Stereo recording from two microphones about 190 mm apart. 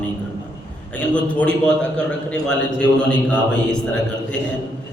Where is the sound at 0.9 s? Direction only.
5° left (ahead or behind).